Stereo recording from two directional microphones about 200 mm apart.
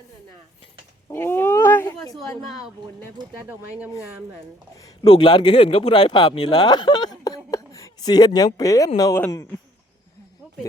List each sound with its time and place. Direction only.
1.1 s roaring cats: 10° left (ahead or behind)
3.2 s speech: 10° right (ahead or behind)
4.8 s speech: 20° left (ahead or behind)